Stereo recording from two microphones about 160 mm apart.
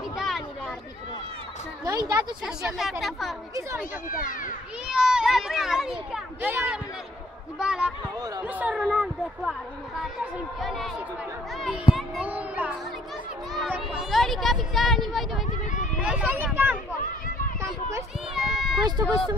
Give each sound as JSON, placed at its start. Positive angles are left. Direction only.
{"t": 0.1, "sound": "a sound", "side_deg": 0}
{"t": 1.9, "sound": "speech", "side_deg": -25}
{"t": 2.4, "sound": "speech", "side_deg": -5}
{"t": 4.1, "sound": "a child's voice", "side_deg": 55}
{"t": 4.8, "sound": "speech", "side_deg": -5}
{"t": 8.2, "sound": "speech", "side_deg": -25}
{"t": 8.5, "sound": "speech", "side_deg": -10}
{"t": 8.7, "sound": "speech", "side_deg": 0}
{"t": 11.9, "sound": "a sound", "side_deg": -5}
{"t": 13.5, "sound": "speech", "side_deg": 0}
{"t": 18.3, "sound": "speech", "side_deg": 0}
{"t": 18.9, "sound": "speech", "side_deg": -25}